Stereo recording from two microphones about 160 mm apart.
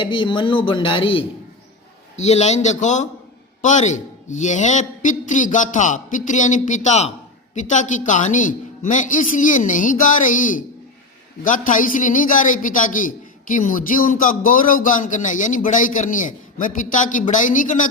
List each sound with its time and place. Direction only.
0.0 s speech: 30° left (ahead or behind)
2.1 s a man's voice: 45° left (ahead or behind)